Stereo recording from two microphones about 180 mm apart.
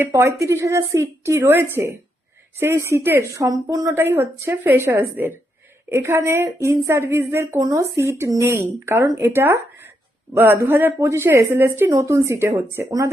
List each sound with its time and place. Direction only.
0.0 s a woman's voice: 15° right (ahead or behind)